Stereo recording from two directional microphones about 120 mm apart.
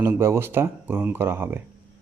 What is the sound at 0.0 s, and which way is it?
Speech, 20° right (ahead or behind).